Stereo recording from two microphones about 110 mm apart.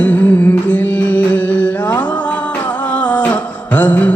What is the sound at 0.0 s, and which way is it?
Music, 15° left (ahead or behind).